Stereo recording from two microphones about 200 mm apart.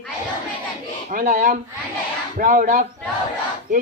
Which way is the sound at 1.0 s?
40° right (ahead or behind).